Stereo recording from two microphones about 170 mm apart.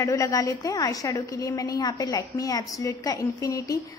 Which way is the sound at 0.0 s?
20° left (ahead or behind).